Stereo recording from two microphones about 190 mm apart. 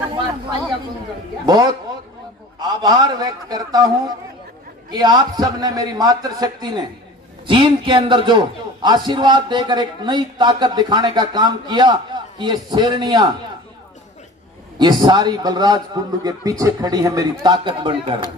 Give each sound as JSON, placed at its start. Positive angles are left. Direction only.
{"t": 1.4, "sound": "a man's voice", "side_deg": -20}
{"t": 14.8, "sound": "a man's voice", "side_deg": -20}